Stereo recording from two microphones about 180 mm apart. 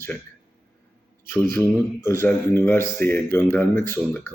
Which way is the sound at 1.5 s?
15° left (ahead or behind).